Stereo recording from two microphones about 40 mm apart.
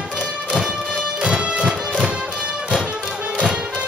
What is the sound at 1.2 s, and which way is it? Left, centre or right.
Music, right.